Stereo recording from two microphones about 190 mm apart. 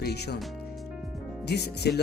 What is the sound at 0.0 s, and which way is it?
Speech, 60° left (ahead or behind).